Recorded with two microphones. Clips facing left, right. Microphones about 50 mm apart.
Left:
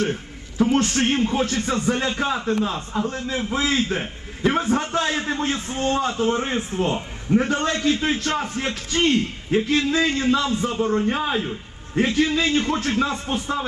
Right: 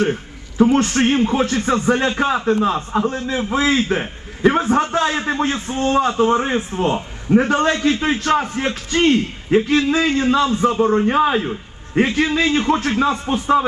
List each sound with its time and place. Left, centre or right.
0.6 s a man's voice: right
3.1 s a man's voice: right